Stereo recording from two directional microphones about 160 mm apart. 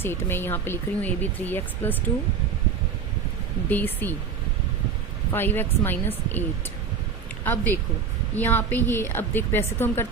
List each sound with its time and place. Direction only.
0.0 s speech: 15° left (ahead or behind)
3.7 s speech: 10° left (ahead or behind)
5.3 s speech: 15° left (ahead or behind)
7.4 s speech: 10° left (ahead or behind)